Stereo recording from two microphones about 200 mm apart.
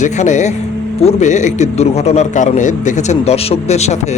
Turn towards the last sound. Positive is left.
turn(degrees=35)  # may be behind; listen again after turning